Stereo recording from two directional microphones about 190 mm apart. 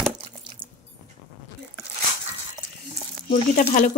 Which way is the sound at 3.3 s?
45° left (ahead or behind).